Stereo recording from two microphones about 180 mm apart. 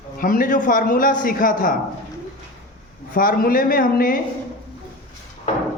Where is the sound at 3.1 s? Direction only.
55° left (ahead or behind).